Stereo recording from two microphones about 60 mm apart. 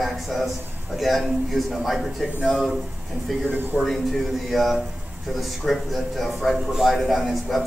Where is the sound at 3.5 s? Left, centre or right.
Right.